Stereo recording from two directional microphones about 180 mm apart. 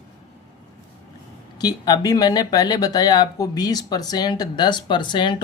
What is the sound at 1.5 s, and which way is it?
Speech, 20° left (ahead or behind).